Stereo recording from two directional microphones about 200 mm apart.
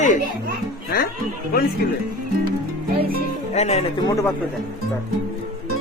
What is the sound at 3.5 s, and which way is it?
Speech, 35° left (ahead or behind).